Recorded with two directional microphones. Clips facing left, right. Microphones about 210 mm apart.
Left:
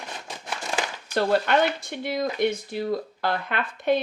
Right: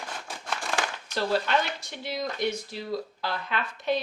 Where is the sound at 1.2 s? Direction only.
55° left (ahead or behind).